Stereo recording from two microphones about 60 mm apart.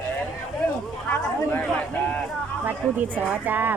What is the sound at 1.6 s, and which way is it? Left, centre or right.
Speech, left.